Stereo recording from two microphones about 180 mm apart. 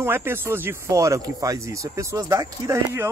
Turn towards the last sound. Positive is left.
turn(degrees=-15)  # may be behind; listen again after turning